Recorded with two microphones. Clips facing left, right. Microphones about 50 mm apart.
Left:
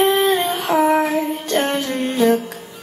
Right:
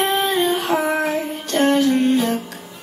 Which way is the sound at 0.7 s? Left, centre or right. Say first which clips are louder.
Left 5 dB; left.